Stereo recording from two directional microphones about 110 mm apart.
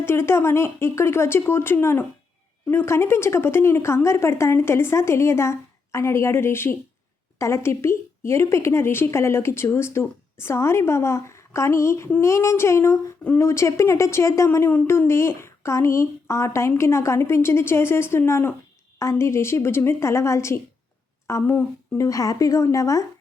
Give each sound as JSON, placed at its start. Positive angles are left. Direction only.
{"t": 0.0, "sound": "speech", "side_deg": 20}